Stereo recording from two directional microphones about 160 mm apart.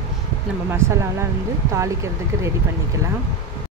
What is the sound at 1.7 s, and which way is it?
Speech, 20° right (ahead or behind).